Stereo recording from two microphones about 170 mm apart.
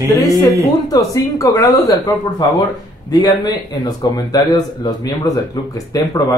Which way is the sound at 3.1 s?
25° left (ahead or behind).